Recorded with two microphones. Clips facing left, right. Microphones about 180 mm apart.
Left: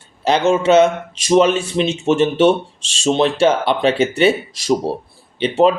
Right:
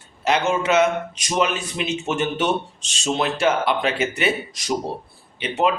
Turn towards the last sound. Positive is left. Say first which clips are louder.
# left 7 dB
turn(degrees=30)  # may be behind; listen again after turning